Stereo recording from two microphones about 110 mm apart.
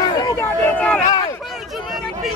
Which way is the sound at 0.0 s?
35° left (ahead or behind).